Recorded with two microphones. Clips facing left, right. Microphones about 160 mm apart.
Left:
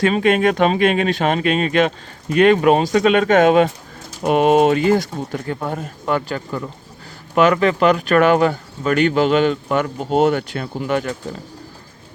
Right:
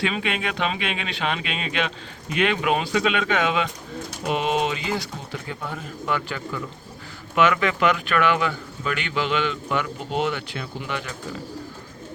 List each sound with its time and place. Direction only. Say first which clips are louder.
0.0 s speech: left 11 dB; 45° left (ahead or behind)